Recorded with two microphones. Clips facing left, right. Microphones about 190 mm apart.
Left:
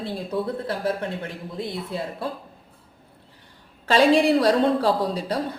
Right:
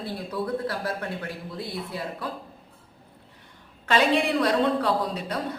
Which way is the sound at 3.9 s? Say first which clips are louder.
Left 5 dB; 35° left (ahead or behind).